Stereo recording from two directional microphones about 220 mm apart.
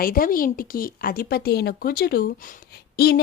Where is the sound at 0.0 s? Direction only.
40° left (ahead or behind).